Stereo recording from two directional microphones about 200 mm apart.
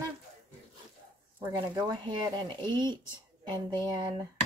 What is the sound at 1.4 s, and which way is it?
Speech, 20° right (ahead or behind).